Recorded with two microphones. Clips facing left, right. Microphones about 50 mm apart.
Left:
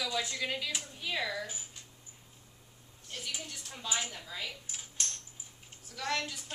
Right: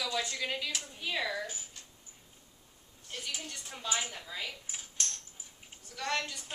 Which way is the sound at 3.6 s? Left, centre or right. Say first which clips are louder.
Right 1 dB; centre.